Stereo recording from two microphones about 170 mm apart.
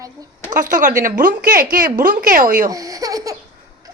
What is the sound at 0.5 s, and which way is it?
A woman's voice, 50° right (ahead or behind).